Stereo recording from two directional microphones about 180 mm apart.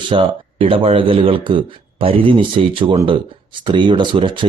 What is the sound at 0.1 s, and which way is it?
Speech, 30° right (ahead or behind).